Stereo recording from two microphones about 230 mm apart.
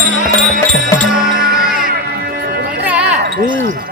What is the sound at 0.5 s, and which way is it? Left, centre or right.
Music, right.